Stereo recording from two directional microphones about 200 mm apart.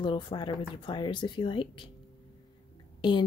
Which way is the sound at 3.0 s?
25° left (ahead or behind).